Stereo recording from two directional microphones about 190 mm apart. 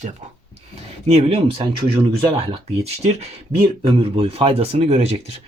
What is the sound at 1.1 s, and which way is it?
Speech, 30° right (ahead or behind).